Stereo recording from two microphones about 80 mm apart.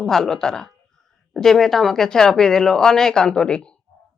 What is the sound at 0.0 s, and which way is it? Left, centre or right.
A woman's voice, centre.